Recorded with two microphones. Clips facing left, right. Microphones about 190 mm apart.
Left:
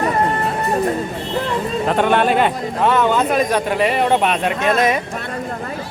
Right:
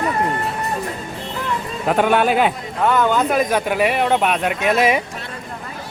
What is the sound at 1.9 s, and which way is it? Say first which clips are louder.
Speech: right 1 dB; 5° right (ahead or behind).